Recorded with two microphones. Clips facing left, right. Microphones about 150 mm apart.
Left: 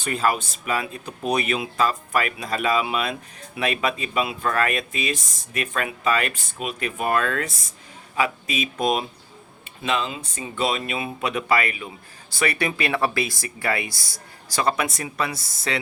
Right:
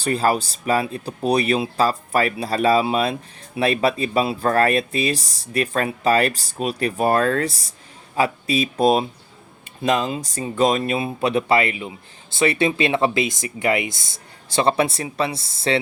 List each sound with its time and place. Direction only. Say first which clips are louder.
0.0 s speech: right 4 dB; 35° right (ahead or behind)